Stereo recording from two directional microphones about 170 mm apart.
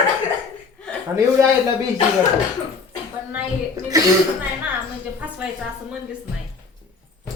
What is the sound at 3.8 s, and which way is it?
Speech, 20° right (ahead or behind).